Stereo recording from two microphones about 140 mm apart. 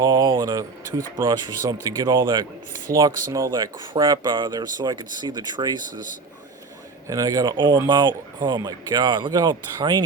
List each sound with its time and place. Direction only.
0.0 s speech: 30° right (ahead or behind)
0.9 s speech: 80° right
1.1 s speech: 25° right (ahead or behind)
7.1 s speech: 25° right (ahead or behind)